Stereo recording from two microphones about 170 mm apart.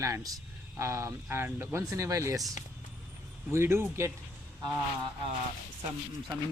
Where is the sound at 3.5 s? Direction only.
15° right (ahead or behind).